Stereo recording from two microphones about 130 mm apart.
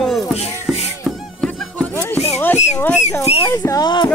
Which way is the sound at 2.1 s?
55° left (ahead or behind).